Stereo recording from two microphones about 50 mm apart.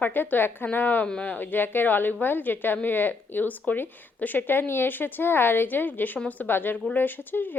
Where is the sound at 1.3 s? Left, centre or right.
Left.